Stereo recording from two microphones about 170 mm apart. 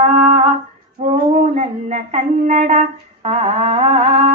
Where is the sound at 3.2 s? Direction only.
40° right (ahead or behind).